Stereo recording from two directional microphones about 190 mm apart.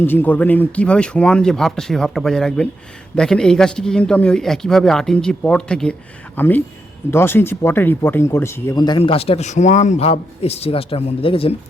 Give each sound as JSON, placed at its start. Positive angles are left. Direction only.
{"t": 0.0, "sound": "speech", "side_deg": 10}